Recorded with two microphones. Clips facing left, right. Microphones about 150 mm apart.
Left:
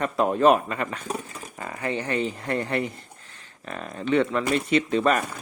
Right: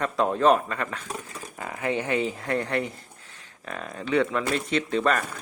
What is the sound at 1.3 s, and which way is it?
A man's voice, 5° right (ahead or behind).